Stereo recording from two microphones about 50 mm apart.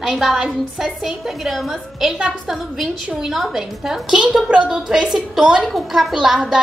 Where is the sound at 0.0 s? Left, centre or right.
Centre.